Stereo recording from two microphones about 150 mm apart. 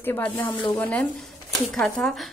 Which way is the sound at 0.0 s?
15° left (ahead or behind).